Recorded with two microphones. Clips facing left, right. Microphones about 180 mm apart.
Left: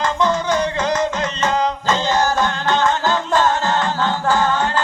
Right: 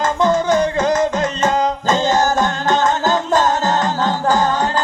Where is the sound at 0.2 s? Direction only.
45° right (ahead or behind).